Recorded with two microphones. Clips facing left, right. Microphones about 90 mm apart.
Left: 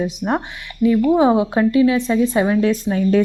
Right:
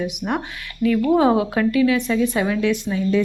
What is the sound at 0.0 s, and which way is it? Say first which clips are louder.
Speech: left 3 dB; 30° left (ahead or behind).